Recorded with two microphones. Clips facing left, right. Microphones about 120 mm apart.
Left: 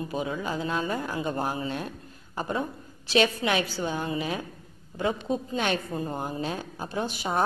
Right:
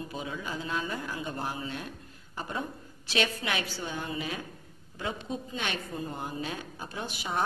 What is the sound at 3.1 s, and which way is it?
A woman's voice, 30° left (ahead or behind).